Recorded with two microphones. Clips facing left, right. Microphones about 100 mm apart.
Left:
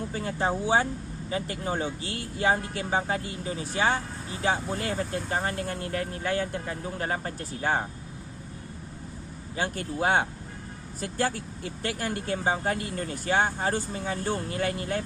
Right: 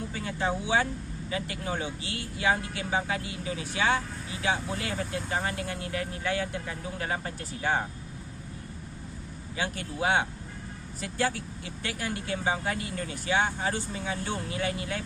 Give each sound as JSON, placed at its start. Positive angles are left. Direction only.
{"t": 0.1, "sound": "speech", "side_deg": 40}
{"t": 9.6, "sound": "speech", "side_deg": 40}